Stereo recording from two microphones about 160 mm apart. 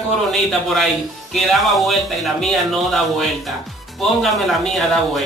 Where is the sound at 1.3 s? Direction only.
Centre (ahead or behind).